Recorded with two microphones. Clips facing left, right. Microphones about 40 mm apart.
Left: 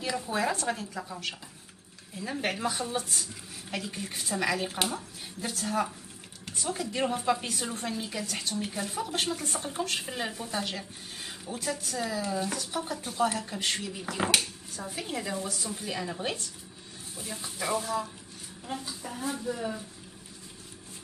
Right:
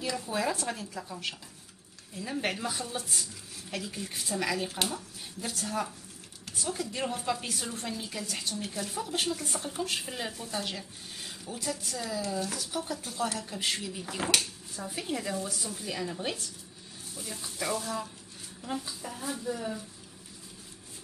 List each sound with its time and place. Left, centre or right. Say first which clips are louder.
0.0 s a woman's voice: left 1 dB; centre
3.0 s a woman's voice: left 2 dB; centre
3.7 s a woman's voice: left 1 dB; centre
13.6 s a woman's voice: left 1 dB; centre
14.9 s a woman's voice: right 1 dB; centre
15.7 s a woman's voice: left 1 dB; centre
18.6 s a woman's voice: right 1 dB; centre